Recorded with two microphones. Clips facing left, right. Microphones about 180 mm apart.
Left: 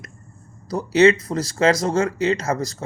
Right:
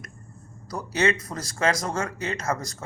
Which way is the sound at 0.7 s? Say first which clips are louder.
Left 10 dB; 25° left (ahead or behind).